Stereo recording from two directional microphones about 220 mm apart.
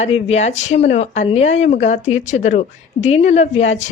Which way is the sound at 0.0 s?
30° left (ahead or behind).